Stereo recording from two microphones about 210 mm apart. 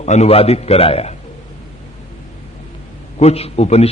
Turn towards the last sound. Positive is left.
turn(degrees=30)  # may be behind; listen again after turning